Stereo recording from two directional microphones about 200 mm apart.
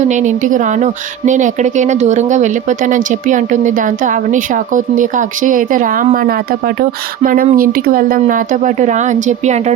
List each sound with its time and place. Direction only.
0.0 s speech: 35° right (ahead or behind)